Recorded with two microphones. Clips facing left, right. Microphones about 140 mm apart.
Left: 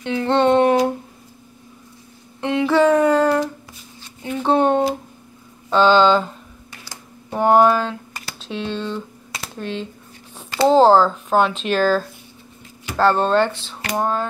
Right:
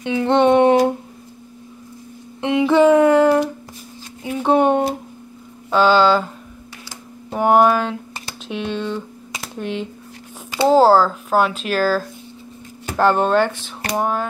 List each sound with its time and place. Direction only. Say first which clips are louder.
0.0 s speech: right 2 dB; 15° right (ahead or behind)
2.4 s a sound: right 2 dB; 15° right (ahead or behind)
5.7 s speech: even; 10° right (ahead or behind)
7.3 s speech: even; 10° right (ahead or behind)